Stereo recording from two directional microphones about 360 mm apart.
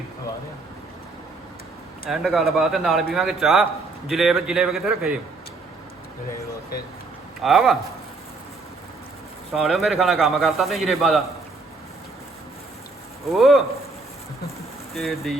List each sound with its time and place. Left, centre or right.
2.0 s speech: centre
7.4 s speech: centre
9.5 s speech: centre
13.3 s speech: centre
14.9 s speech: centre